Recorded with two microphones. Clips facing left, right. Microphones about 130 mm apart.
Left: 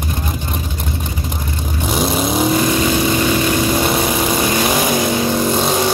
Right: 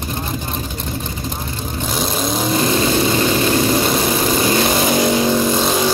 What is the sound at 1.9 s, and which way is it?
Vehicle, 5° left (ahead or behind).